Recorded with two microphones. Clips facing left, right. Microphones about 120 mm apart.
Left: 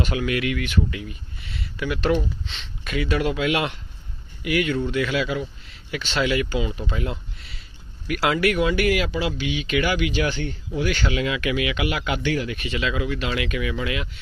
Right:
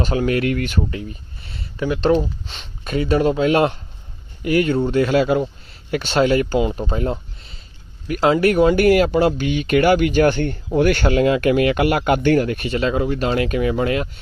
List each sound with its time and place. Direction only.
0.0 s speech: 35° right (ahead or behind)